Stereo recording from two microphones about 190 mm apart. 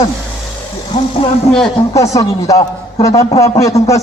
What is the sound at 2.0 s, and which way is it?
A man's voice, 15° left (ahead or behind).